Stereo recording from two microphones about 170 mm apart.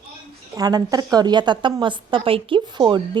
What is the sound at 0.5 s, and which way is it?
Speech, 20° right (ahead or behind).